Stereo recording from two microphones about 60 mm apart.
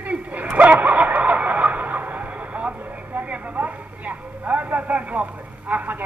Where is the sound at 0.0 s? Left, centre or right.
Right.